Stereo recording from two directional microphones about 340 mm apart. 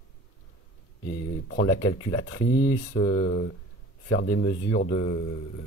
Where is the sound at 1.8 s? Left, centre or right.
Centre.